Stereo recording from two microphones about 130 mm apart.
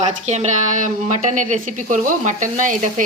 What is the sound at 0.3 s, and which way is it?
A woman's voice, 60° right (ahead or behind).